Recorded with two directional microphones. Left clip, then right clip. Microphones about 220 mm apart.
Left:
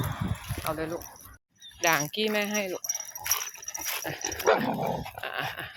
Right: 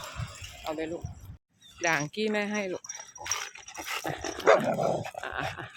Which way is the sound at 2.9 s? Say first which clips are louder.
Left 3 dB; 5° right (ahead or behind).